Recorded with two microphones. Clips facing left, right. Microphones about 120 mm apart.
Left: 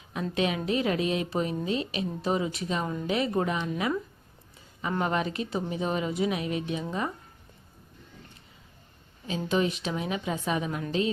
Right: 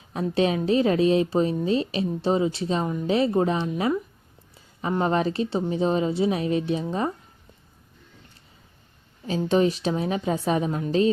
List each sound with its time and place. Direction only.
0.1 s a woman's voice: 35° right (ahead or behind)
9.5 s a woman's voice: 35° right (ahead or behind)